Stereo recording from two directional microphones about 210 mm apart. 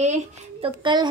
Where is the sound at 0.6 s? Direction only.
20° right (ahead or behind).